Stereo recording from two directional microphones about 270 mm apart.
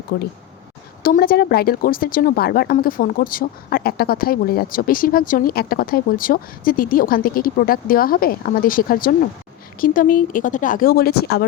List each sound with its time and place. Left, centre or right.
0.1 s speech: left